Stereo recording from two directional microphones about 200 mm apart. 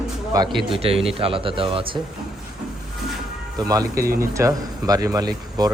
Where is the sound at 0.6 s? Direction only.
30° right (ahead or behind).